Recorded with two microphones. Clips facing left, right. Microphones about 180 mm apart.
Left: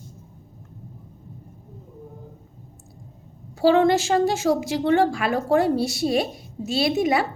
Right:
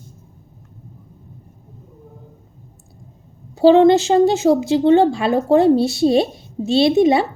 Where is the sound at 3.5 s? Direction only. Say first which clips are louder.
Right 7 dB; 25° right (ahead or behind).